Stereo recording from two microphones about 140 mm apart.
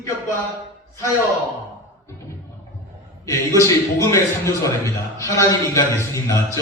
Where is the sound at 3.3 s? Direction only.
20° left (ahead or behind).